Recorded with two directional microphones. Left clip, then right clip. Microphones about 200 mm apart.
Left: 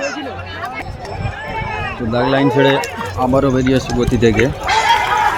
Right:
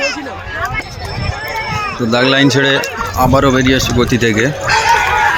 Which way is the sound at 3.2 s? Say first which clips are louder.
Right 4 dB; centre (ahead or behind).